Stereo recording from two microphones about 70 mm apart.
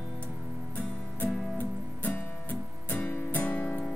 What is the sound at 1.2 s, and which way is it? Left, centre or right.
Music, left.